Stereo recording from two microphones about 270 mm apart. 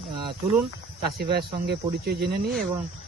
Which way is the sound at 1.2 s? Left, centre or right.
Right.